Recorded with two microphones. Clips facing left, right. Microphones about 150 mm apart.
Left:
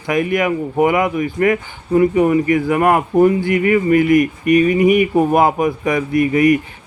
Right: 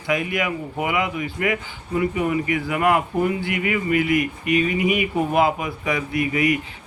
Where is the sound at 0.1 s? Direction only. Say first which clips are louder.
Left 7 dB; 50° left (ahead or behind).